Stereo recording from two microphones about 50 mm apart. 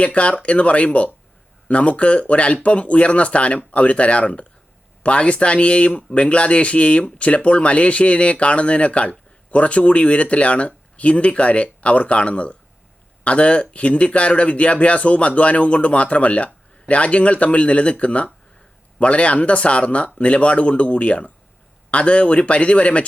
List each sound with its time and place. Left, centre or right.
0.0 s speech: left